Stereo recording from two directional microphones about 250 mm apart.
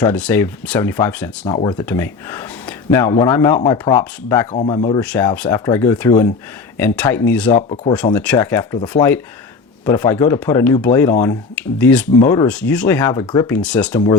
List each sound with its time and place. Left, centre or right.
0.0 s speech: centre; by 4.9 s left
4.9 s speech: centre
7.5 s speech: left
8.1 s speech: centre
12.2 s speech: left
12.5 s speech: centre